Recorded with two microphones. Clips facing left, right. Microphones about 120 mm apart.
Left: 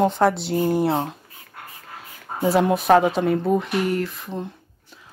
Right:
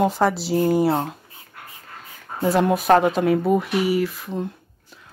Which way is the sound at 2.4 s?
Centre (ahead or behind).